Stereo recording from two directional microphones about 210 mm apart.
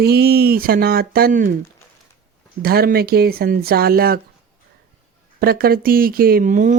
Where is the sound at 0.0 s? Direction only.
50° right (ahead or behind).